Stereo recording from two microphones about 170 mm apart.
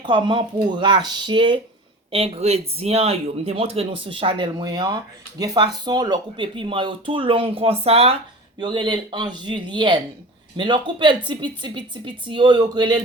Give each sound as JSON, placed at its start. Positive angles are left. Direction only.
{"t": 0.0, "sound": "speech", "side_deg": -30}